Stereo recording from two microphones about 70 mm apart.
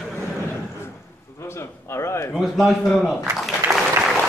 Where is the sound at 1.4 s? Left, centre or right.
Left.